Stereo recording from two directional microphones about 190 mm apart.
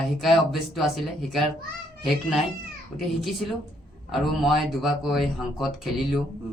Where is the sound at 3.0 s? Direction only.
Centre (ahead or behind).